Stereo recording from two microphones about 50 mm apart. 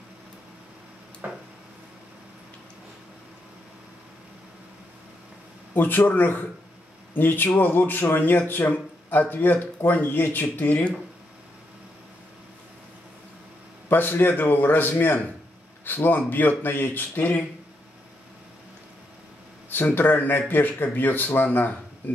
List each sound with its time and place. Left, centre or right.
5.8 s speech: left
13.8 s a man's voice: left
19.7 s speech: left